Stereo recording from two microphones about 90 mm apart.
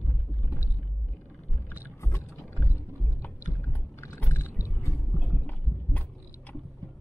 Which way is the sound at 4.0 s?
30° left (ahead or behind).